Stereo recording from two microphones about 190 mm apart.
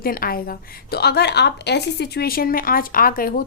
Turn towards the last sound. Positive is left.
turn(degrees=50)  # may be behind; listen again after turning